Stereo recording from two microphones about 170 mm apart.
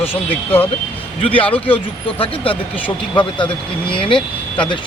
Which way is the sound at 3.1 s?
30° left (ahead or behind).